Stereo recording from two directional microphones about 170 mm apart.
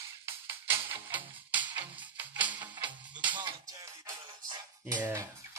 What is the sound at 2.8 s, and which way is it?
Music, 30° right (ahead or behind).